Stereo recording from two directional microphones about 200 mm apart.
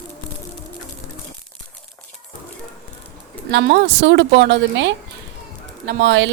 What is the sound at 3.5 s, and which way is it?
A woman's voice, 60° right (ahead or behind).